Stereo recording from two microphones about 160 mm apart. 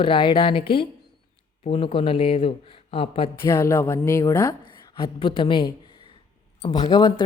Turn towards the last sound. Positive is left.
turn(degrees=25)  # may be behind; listen again after turning